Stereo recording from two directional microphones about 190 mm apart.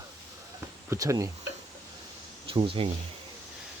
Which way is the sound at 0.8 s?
15° right (ahead or behind).